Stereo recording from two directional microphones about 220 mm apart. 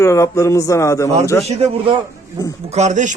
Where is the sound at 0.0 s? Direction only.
15° left (ahead or behind).